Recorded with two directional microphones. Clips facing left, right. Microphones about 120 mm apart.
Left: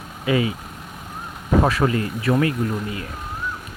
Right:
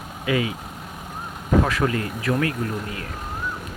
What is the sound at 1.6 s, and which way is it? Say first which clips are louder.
Speech: left 5 dB; 25° left (ahead or behind).